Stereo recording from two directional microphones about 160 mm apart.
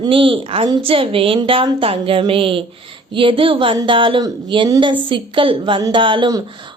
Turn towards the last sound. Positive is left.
turn(degrees=-30)  # may be behind; listen again after turning